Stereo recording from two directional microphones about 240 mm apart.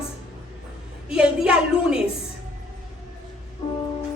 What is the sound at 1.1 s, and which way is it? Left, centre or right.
Speech, centre.